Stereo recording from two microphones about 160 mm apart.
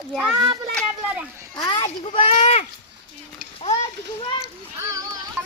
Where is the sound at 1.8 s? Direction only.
35° left (ahead or behind).